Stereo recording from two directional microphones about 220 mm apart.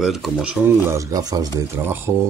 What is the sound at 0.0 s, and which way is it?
Speech, centre (ahead or behind).